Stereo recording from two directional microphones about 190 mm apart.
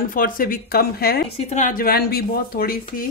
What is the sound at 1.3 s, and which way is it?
Speech, 35° left (ahead or behind).